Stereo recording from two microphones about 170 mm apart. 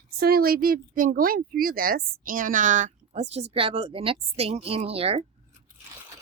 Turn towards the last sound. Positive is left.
turn(degrees=-35)  # may be behind; listen again after turning